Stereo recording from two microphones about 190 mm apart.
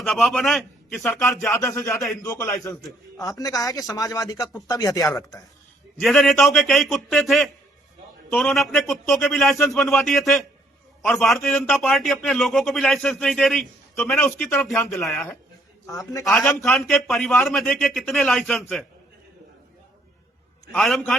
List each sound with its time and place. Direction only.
0.0 s a man's voice: centre (ahead or behind)
1.5 s speech: 10° left (ahead or behind)
1.9 s a man's voice: centre (ahead or behind)
2.2 s a man's voice: 15° left (ahead or behind)
6.0 s a man's voice: centre (ahead or behind)
15.9 s a man's voice: 20° left (ahead or behind)
16.2 s a man's voice: centre (ahead or behind)
20.7 s a man's voice: centre (ahead or behind)